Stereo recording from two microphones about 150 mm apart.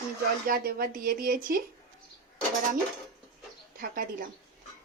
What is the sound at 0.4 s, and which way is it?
Speech, 75° right (ahead or behind).